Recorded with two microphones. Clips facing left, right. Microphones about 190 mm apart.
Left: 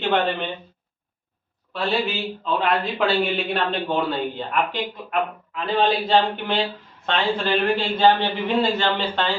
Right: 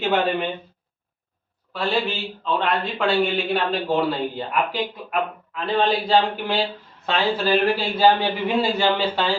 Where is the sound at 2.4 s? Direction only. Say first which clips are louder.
Even; 5° left (ahead or behind).